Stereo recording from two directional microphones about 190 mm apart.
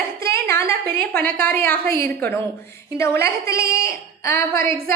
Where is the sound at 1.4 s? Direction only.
10° left (ahead or behind).